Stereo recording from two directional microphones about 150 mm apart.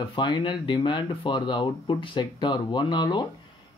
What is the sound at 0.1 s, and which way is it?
Speech, 30° left (ahead or behind).